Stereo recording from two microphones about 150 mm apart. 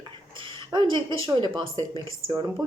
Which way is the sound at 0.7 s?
30° right (ahead or behind).